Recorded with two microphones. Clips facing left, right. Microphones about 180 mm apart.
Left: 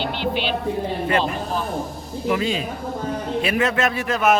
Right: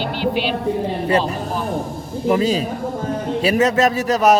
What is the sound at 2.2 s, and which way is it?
A man's voice, 40° right (ahead or behind).